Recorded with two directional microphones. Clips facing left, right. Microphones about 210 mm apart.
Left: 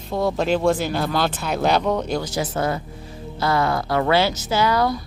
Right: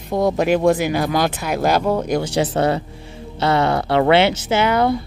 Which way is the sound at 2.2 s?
30° right (ahead or behind).